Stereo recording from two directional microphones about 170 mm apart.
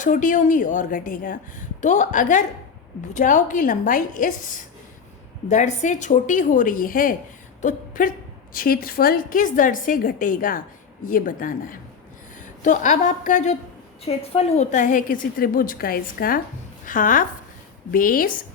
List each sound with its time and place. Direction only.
0.0 s a woman's voice: 50° left (ahead or behind)
7.6 s a sound: 50° left (ahead or behind)
8.5 s a woman's voice: 60° left (ahead or behind)